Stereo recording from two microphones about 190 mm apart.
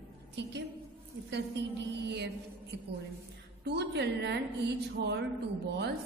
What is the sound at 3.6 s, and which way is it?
A woman's voice, 60° right (ahead or behind).